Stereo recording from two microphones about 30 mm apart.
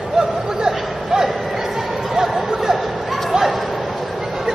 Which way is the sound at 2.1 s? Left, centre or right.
Centre.